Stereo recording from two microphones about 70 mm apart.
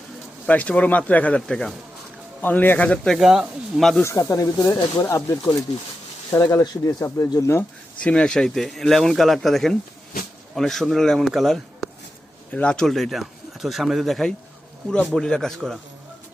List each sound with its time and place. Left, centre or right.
0.4 s speech: left
2.4 s speech: left
3.2 s speech: centre
4.0 s speech: left
8.0 s speech: centre
12.5 s a man's voice: centre
12.9 s a man's voice: centre